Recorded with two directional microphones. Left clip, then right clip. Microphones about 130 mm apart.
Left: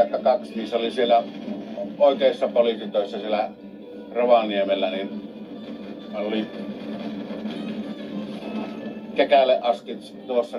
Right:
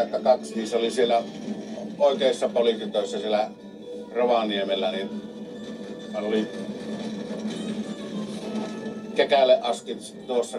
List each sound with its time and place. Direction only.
0.1 s a man's voice: 50° right (ahead or behind)
6.1 s a man's voice: 50° right (ahead or behind)
9.1 s a man's voice: 55° right (ahead or behind)